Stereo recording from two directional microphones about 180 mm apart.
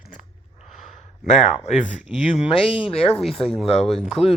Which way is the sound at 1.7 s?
40° left (ahead or behind).